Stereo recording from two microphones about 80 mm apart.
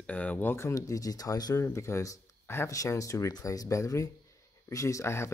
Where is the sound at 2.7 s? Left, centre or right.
Left.